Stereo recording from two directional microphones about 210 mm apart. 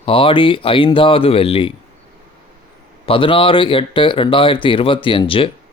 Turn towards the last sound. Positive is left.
turn(degrees=25)  # may be behind; listen again after turning